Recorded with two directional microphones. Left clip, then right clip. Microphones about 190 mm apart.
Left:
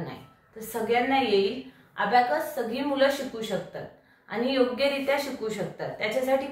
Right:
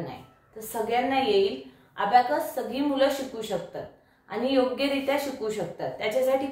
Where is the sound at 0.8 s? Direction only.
20° right (ahead or behind).